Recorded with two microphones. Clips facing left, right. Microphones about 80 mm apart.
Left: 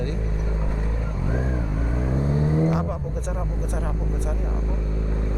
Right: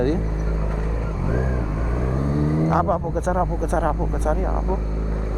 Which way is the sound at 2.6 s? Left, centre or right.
Right.